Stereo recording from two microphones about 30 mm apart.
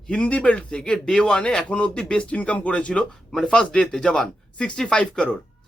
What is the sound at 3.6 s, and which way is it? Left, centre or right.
Speech, left.